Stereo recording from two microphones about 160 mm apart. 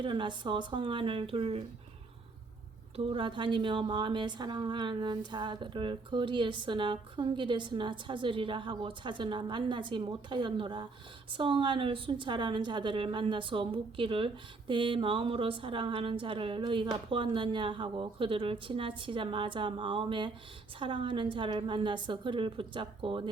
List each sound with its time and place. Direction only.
0.0 s a woman's voice: 30° right (ahead or behind)
2.9 s a woman's voice: 35° right (ahead or behind)